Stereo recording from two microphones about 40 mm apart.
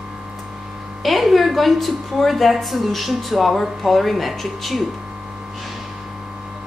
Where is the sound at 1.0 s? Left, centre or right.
Centre.